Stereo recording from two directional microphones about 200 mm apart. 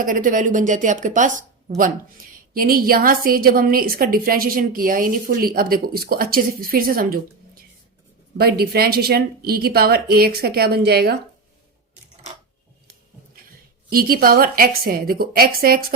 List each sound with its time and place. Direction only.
0.0 s a woman's voice: 40° right (ahead or behind)
13.9 s a woman's voice: 45° right (ahead or behind)